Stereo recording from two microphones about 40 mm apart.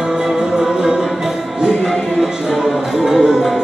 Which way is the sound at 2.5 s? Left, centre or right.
Centre.